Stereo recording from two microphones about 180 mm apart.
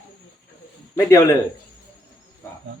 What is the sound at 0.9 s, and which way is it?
Speech, 15° left (ahead or behind).